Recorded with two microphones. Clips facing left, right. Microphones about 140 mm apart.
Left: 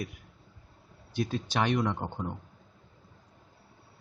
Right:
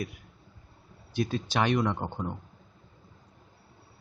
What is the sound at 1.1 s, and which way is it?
Speech, 80° right.